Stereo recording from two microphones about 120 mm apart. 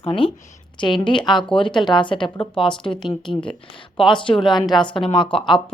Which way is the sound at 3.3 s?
10° left (ahead or behind).